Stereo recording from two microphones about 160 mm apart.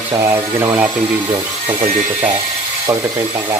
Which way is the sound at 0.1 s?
15° right (ahead or behind).